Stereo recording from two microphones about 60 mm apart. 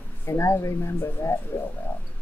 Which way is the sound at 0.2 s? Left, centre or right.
Left.